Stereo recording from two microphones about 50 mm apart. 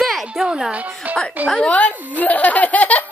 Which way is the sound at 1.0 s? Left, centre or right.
Right.